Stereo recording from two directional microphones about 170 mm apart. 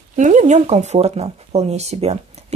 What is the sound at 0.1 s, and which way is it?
A woman's voice, 45° right (ahead or behind).